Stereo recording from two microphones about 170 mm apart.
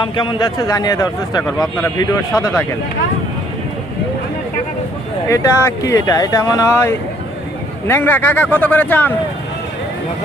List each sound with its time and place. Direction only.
0.0 s speech: 30° left (ahead or behind)
5.3 s speech: 15° left (ahead or behind)